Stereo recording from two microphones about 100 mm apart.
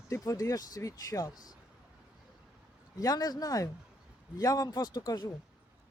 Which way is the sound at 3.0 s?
35° left (ahead or behind).